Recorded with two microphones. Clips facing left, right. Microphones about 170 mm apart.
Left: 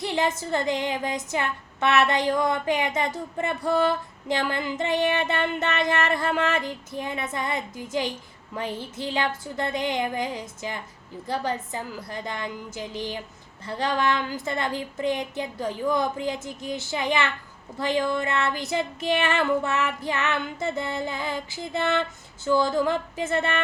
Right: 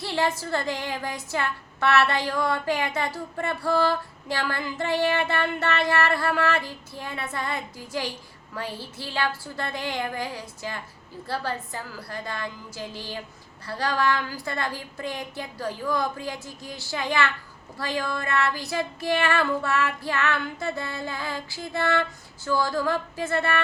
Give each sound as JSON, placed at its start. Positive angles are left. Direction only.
{"t": 0.0, "sound": "speech", "side_deg": 20}